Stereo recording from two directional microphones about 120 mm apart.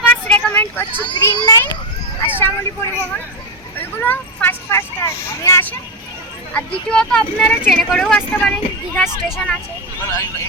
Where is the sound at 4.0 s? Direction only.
15° left (ahead or behind).